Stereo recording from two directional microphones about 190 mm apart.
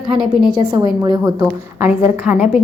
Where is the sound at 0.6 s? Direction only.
20° right (ahead or behind); by 2.4 s 5° right (ahead or behind).